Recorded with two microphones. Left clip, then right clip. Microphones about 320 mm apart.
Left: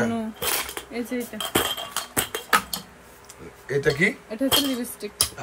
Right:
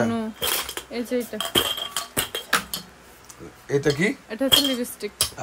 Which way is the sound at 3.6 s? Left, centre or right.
Centre.